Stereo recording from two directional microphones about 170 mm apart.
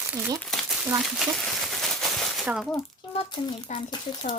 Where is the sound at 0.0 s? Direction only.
10° right (ahead or behind).